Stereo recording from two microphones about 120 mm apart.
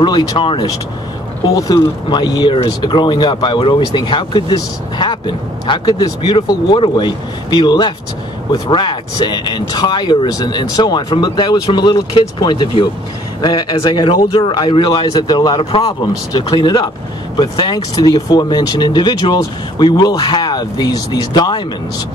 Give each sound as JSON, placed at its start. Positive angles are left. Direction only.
{"t": 0.0, "sound": "speech", "side_deg": 35}
{"t": 0.4, "sound": "speech", "side_deg": 45}
{"t": 1.5, "sound": "speech", "side_deg": 30}